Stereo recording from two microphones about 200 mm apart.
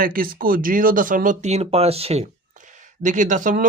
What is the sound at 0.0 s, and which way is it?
Speech, 45° right (ahead or behind).